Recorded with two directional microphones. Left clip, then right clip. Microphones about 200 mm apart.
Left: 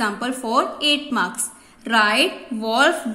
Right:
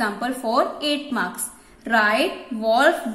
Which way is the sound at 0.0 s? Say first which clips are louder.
Even; 10° left (ahead or behind).